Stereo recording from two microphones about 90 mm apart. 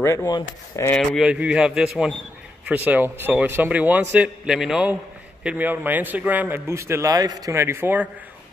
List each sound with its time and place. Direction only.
0.0 s speech: 30° left (ahead or behind)
1.2 s a man's voice: 10° right (ahead or behind)
2.6 s a man's voice: 20° right (ahead or behind)
4.5 s a man's voice: 10° right (ahead or behind)
6.7 s a man's voice: 30° right (ahead or behind)